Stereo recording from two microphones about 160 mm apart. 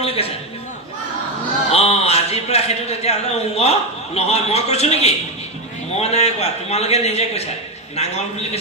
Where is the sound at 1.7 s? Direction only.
40° left (ahead or behind).